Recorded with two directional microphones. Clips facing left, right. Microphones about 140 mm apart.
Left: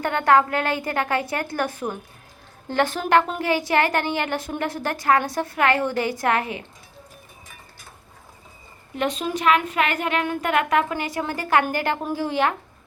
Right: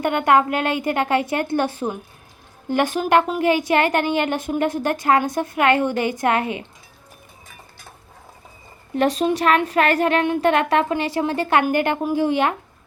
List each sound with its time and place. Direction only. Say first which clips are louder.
0.0 s a woman's voice: right 1 dB; 20° right (ahead or behind)
2.6 s a woman's voice: right 2 dB; 15° right (ahead or behind)
9.0 s a woman's voice: right 6 dB; 40° right (ahead or behind); by 12.5 s 20° right (ahead or behind)